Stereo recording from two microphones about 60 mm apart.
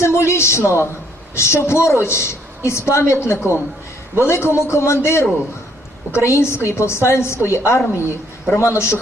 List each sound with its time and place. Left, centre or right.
0.0 s a man's voice: left